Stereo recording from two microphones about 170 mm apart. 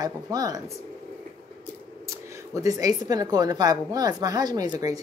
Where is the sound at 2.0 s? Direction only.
20° right (ahead or behind).